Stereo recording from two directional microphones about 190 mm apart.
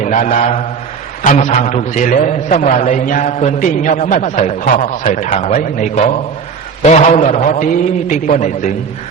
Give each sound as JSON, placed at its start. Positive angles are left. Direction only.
{"t": 0.0, "sound": "mantra", "side_deg": 40}
{"t": 1.2, "sound": "a man's voice", "side_deg": 40}
{"t": 4.7, "sound": "a man's voice", "side_deg": 45}
{"t": 5.3, "sound": "a man's voice", "side_deg": 30}